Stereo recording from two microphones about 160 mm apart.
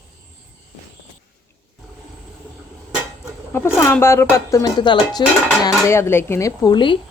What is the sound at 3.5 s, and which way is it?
Speech, 15° left (ahead or behind).